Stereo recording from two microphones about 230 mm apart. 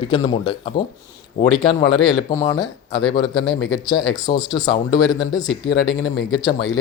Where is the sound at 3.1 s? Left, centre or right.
Centre.